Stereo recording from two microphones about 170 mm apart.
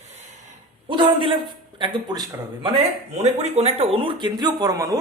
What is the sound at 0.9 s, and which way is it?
A man's voice, 30° right (ahead or behind).